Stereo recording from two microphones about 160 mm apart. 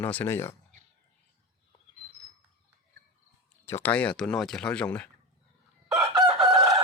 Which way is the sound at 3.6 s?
15° left (ahead or behind).